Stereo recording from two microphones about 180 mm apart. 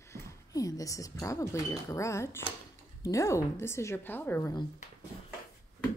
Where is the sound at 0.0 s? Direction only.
15° left (ahead or behind).